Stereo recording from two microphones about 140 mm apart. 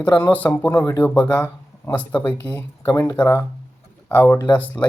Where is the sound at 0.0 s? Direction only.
10° left (ahead or behind).